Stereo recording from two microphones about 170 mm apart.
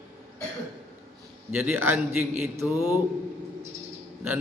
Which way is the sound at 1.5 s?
10° right (ahead or behind).